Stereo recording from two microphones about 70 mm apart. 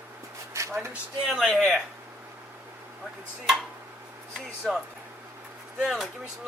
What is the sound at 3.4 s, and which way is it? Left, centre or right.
Speech, centre.